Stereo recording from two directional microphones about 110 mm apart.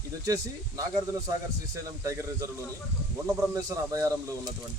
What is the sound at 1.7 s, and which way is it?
Speech, 30° right (ahead or behind).